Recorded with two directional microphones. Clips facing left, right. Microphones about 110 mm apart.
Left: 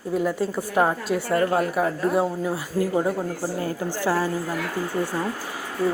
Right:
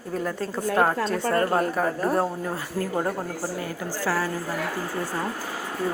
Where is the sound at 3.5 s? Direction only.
30° left (ahead or behind).